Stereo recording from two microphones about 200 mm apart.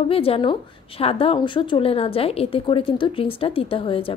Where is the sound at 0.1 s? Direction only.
30° left (ahead or behind).